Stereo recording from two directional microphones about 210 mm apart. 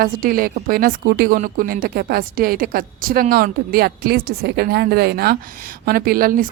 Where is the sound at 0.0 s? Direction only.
45° right (ahead or behind).